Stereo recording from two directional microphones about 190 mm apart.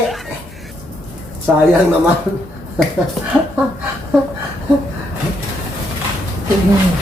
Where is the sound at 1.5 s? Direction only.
Centre (ahead or behind).